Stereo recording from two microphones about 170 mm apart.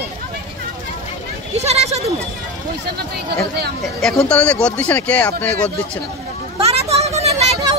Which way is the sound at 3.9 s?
5° left (ahead or behind).